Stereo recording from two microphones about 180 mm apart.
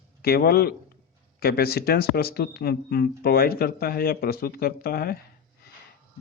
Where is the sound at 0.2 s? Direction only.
60° left (ahead or behind).